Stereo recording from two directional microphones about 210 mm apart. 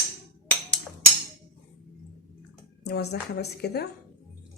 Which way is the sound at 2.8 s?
50° left (ahead or behind).